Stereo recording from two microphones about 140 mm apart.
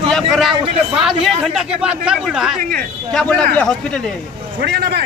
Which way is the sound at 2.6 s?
90° right.